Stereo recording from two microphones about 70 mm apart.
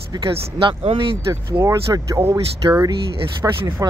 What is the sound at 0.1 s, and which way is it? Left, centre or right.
Speech, right.